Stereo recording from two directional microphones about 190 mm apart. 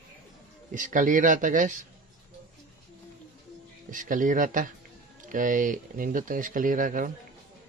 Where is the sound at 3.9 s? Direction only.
45° right (ahead or behind).